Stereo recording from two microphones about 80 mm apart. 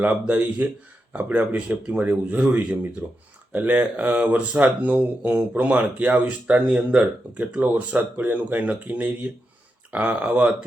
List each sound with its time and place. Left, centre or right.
0.0 s speech: centre